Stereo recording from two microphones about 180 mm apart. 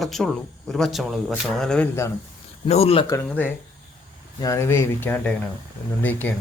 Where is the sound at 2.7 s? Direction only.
35° left (ahead or behind).